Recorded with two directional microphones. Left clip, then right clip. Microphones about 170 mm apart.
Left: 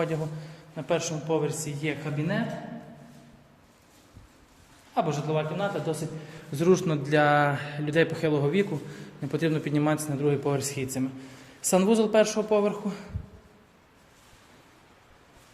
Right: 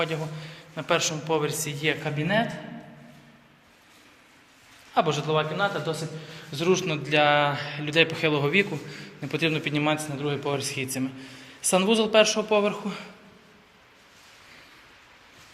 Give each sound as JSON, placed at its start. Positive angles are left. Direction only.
{"t": 0.0, "sound": "a man's voice", "side_deg": 25}
{"t": 2.0, "sound": "a man's voice", "side_deg": -20}
{"t": 4.9, "sound": "a man's voice", "side_deg": 0}
{"t": 6.5, "sound": "a man's voice", "side_deg": 50}
{"t": 11.6, "sound": "a man's voice", "side_deg": 25}